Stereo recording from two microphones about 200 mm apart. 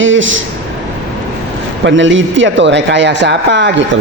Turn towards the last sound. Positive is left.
turn(degrees=-60)  # may be behind; listen again after turning